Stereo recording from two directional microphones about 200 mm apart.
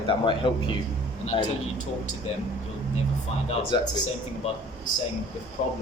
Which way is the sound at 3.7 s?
20° left (ahead or behind).